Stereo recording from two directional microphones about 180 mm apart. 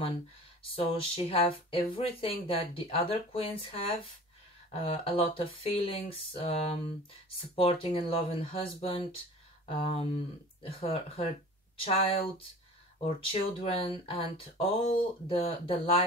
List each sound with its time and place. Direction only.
0.7 s speech: 30° left (ahead or behind)